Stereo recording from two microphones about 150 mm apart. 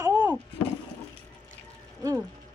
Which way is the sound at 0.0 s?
15° right (ahead or behind).